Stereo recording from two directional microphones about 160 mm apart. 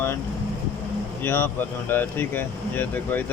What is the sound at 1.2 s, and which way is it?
Speech, 15° left (ahead or behind).